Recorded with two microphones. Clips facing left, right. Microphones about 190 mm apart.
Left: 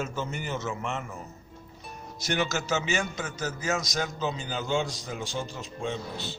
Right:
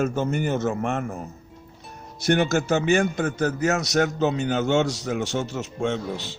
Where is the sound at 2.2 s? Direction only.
55° right (ahead or behind).